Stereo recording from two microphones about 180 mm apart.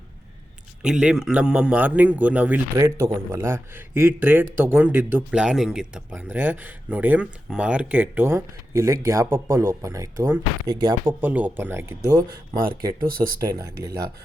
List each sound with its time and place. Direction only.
0.8 s speech: 5° right (ahead or behind); by 11.1 s 20° right (ahead or behind)
11.2 s speech: 10° right (ahead or behind)
12.5 s speech: 50° right (ahead or behind)
13.6 s speech: 20° right (ahead or behind)